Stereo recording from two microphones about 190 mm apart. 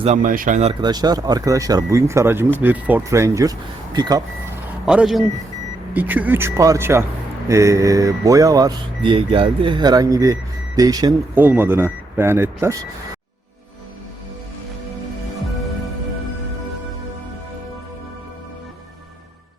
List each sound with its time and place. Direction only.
0.0 s speech: 40° right (ahead or behind)
0.7 s speech: 20° right (ahead or behind)
4.9 s speech: 5° right (ahead or behind)